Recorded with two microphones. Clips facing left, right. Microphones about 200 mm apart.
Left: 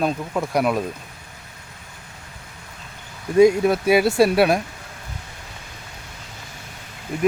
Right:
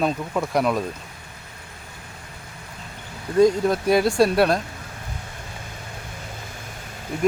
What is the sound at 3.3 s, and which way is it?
Speech, 10° left (ahead or behind).